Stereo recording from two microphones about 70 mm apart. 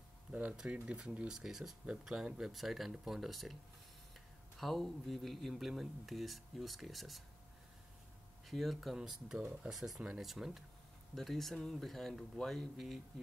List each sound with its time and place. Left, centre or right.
0.3 s speech: centre
4.6 s speech: centre
8.5 s speech: centre